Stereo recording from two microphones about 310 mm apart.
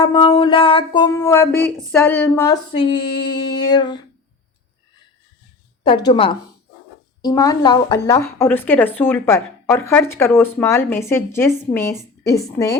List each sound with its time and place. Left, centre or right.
0.0 s a woman's voice: centre
5.8 s a woman's voice: centre